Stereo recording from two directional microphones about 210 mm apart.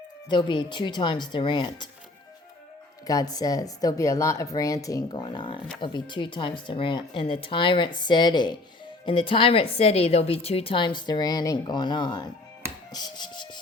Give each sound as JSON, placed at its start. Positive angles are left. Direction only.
{"t": 0.3, "sound": "a woman's voice", "side_deg": 20}
{"t": 3.1, "sound": "a woman's voice", "side_deg": 15}
{"t": 12.9, "sound": "music", "side_deg": 20}